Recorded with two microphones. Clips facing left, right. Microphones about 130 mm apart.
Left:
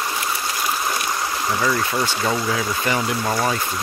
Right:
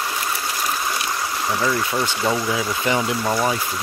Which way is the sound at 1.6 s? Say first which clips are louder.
Even; 10° right (ahead or behind).